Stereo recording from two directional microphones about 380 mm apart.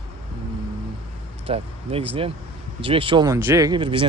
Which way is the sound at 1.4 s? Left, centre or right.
Centre.